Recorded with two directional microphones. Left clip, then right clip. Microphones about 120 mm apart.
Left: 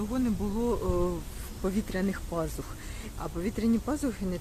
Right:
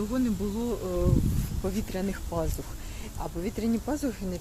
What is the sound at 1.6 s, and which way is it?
Speech, 20° left (ahead or behind).